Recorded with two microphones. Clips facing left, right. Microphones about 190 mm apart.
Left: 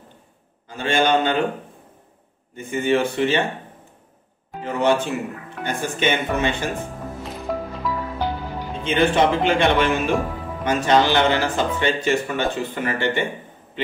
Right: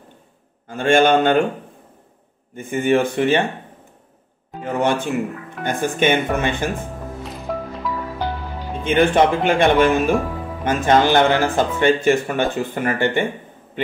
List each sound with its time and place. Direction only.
0.7 s speech: 50° right (ahead or behind)
2.5 s speech: 50° right (ahead or behind)
4.7 s speech: 50° right (ahead or behind)
7.2 s music: centre (ahead or behind)
8.8 s speech: 50° right (ahead or behind)